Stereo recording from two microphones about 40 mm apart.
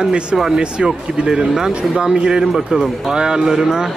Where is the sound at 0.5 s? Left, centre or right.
Centre.